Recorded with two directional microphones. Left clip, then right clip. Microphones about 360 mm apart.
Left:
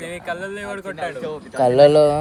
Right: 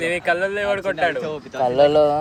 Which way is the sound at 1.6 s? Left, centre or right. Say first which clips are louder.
Left 3 dB; left.